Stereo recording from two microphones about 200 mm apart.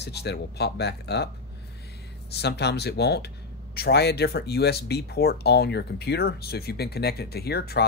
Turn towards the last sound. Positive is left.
turn(degrees=50)  # may be behind; listen again after turning